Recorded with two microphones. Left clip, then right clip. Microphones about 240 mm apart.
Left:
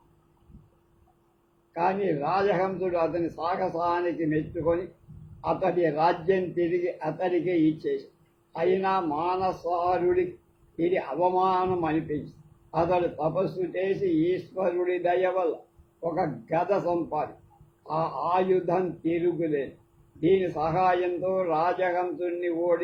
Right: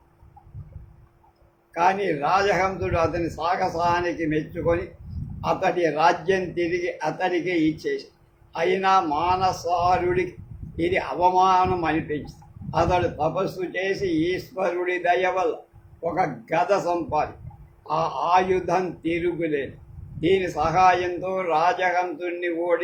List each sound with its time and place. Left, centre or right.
1.7 s a man's voice: right